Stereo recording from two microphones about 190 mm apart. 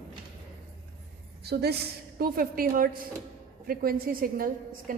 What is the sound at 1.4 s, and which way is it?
A woman's voice, 60° right (ahead or behind).